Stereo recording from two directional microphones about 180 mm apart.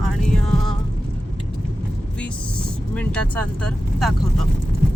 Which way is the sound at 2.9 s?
5° left (ahead or behind).